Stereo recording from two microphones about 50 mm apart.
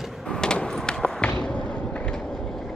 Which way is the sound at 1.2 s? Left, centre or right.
Left.